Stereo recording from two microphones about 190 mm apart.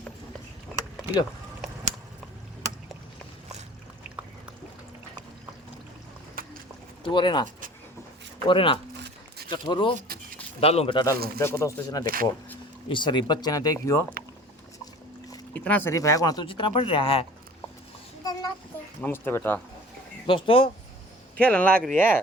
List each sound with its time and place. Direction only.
6.4 s clip-clop: 50° right (ahead or behind)
7.0 s speech: 25° left (ahead or behind)
8.4 s speech: 30° left (ahead or behind)
12.0 s speech: 50° right (ahead or behind)
12.9 s speech: 25° left (ahead or behind)
15.5 s speech: 10° left (ahead or behind); by 17.2 s 30° left (ahead or behind)
19.0 s speech: 10° left (ahead or behind)
20.2 s speech: 25° left (ahead or behind)
21.3 s speech: 5° left (ahead or behind)